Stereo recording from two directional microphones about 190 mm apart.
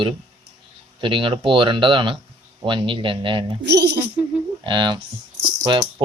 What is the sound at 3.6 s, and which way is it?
Speech, 60° right (ahead or behind).